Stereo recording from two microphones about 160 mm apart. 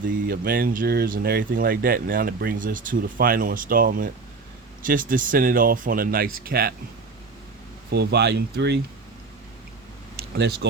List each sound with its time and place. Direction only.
0.3 s speech: 65° right (ahead or behind)
7.9 s speech: 90° right
10.3 s speech: 90° right